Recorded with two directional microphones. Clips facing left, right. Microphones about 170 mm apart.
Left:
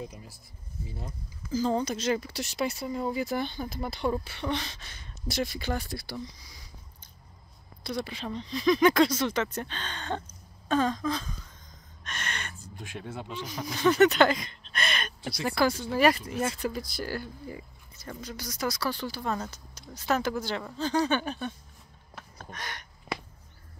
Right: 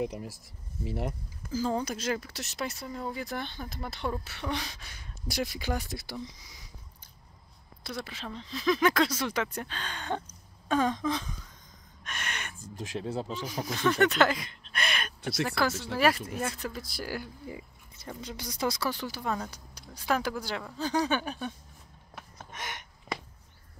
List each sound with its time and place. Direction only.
0.0 s speech: 75° right (ahead or behind)
1.5 s speech: 5° right (ahead or behind)
7.8 s speech: 5° right (ahead or behind)
12.5 s speech: 40° right (ahead or behind)
13.7 s speech: centre (ahead or behind); by 18.9 s 25° right (ahead or behind)
18.9 s speech: 15° right (ahead or behind)
19.2 s speech: centre (ahead or behind)
19.5 s speech: 10° right (ahead or behind)
22.4 s a sound: 20° right (ahead or behind)